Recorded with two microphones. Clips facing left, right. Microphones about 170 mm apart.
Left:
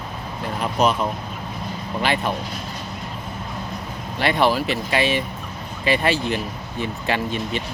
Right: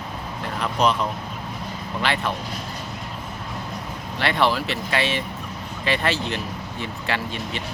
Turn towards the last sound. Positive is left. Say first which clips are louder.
# left 4 dB
turn(degrees=15)  # may be behind; listen again after turning